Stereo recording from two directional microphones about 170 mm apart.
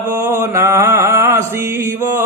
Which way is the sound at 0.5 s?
15° right (ahead or behind).